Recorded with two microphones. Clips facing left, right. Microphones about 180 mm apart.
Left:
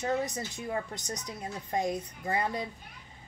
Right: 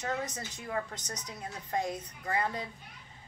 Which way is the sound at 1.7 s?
15° left (ahead or behind).